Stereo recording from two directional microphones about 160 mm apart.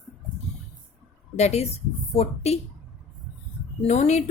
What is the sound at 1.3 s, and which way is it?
Speech, 45° left (ahead or behind).